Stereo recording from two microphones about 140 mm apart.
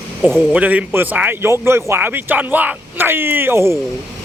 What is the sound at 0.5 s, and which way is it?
Speech, 10° right (ahead or behind).